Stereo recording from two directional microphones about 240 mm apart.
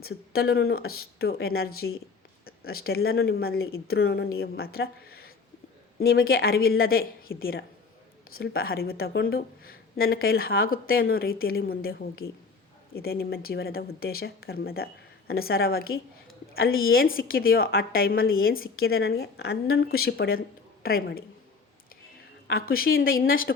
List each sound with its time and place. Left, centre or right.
0.0 s a woman's voice: left
22.4 s a woman's voice: left